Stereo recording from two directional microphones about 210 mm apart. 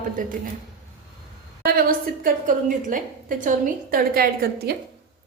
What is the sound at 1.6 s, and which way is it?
A woman's voice, 45° right (ahead or behind).